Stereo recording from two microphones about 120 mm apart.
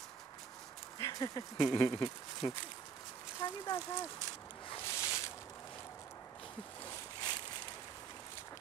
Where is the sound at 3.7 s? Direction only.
40° left (ahead or behind).